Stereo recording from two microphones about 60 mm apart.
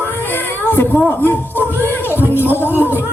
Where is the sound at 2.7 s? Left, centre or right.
Right.